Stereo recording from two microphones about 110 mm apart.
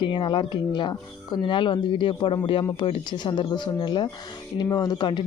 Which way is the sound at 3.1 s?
45° left (ahead or behind).